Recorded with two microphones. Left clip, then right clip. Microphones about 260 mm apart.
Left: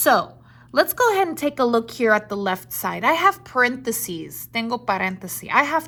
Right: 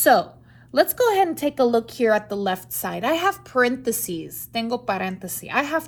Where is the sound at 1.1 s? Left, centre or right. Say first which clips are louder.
Even; left.